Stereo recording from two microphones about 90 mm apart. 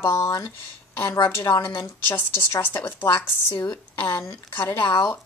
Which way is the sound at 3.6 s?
50° left (ahead or behind).